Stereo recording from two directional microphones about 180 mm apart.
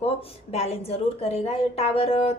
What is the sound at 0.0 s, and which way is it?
A woman's voice, 35° left (ahead or behind).